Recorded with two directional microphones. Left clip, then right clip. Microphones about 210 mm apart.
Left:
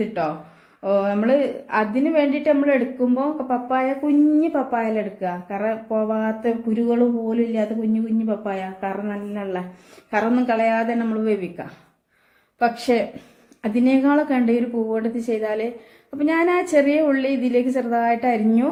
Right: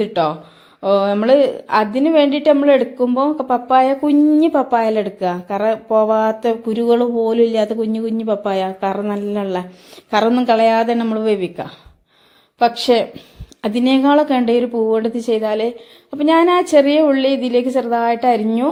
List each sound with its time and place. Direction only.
0.0 s a woman's voice: 30° right (ahead or behind)